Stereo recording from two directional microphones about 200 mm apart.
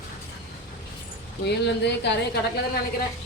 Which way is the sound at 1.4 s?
60° left (ahead or behind).